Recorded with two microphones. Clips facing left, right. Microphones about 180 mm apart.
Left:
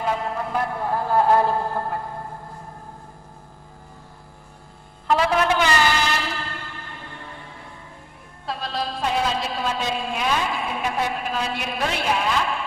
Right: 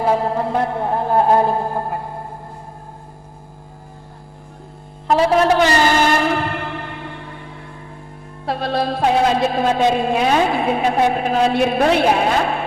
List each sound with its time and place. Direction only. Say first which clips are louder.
0.0 s music: right 8 dB; 35° right (ahead or behind); by 2.2 s 20° right (ahead or behind)
5.1 s a sound: right 6 dB; 30° right (ahead or behind); by 7.2 s 65° right (ahead or behind)
8.4 s a woman's voice: right 8 dB; 65° right (ahead or behind)